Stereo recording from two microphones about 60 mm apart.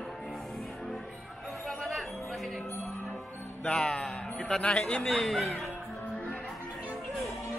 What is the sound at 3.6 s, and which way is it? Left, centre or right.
A man's voice, centre.